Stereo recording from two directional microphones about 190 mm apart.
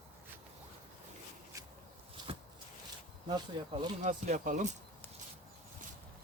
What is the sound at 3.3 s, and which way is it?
Speech, 25° right (ahead or behind).